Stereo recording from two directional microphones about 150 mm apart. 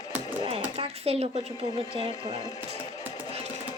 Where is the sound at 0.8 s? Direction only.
40° right (ahead or behind).